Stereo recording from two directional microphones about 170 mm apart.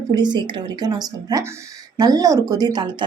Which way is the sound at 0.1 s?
25° right (ahead or behind).